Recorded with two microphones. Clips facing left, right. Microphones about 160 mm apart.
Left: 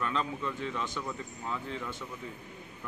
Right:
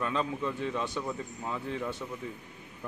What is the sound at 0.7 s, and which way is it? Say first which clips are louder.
Speech: right 3 dB; 15° right (ahead or behind).